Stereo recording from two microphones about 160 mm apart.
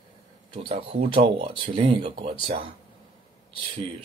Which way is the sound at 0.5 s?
35° right (ahead or behind).